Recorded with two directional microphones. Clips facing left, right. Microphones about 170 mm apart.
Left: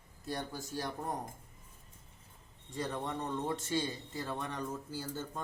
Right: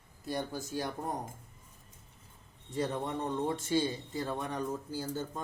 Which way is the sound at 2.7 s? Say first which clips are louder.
Right 4 dB; 20° right (ahead or behind).